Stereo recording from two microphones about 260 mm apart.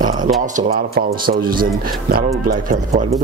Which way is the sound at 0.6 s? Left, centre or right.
Right.